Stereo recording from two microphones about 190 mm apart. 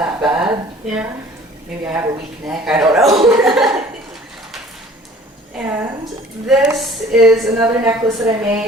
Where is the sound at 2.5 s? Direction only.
5° right (ahead or behind).